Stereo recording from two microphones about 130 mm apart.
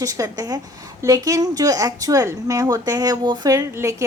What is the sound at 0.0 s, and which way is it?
A woman's voice, 25° right (ahead or behind).